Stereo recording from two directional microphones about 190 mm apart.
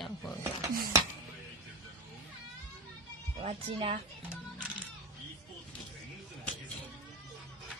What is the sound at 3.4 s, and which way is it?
Speech, 30° right (ahead or behind).